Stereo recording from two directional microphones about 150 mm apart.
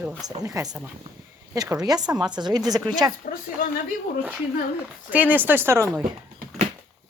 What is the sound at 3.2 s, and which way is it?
Speech, 65° left (ahead or behind).